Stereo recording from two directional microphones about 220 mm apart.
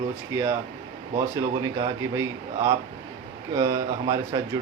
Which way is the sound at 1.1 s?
20° right (ahead or behind).